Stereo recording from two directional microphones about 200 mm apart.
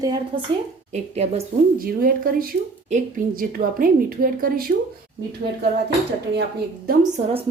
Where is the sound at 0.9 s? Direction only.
35° right (ahead or behind).